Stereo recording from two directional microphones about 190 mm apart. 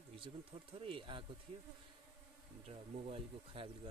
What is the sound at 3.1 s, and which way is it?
Speech, 25° right (ahead or behind).